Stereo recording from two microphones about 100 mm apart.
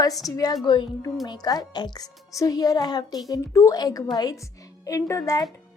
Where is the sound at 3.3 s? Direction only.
30° left (ahead or behind).